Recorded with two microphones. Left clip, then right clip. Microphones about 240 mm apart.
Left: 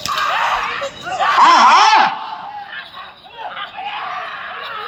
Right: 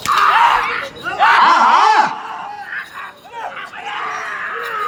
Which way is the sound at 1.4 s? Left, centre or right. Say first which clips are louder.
Left 5 dB; left.